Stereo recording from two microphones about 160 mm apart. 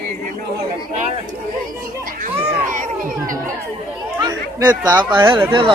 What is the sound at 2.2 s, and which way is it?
Speech, 55° right (ahead or behind).